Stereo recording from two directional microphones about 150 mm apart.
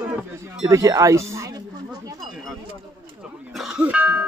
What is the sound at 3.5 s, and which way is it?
Music, 5° right (ahead or behind).